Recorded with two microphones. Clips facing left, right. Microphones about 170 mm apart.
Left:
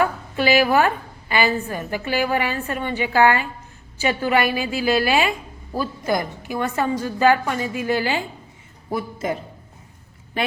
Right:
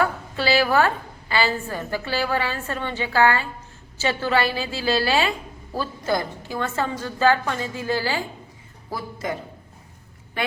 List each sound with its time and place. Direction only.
0.0 s a woman's voice: 15° left (ahead or behind)